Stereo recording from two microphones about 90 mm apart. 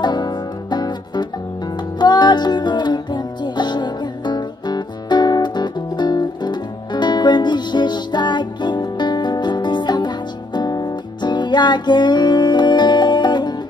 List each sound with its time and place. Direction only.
0.0 s music: 50° left (ahead or behind)